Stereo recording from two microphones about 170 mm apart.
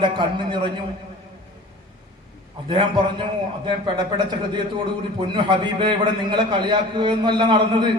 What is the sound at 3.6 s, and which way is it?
A man's voice, 25° right (ahead or behind).